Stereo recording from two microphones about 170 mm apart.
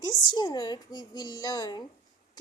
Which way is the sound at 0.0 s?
25° left (ahead or behind).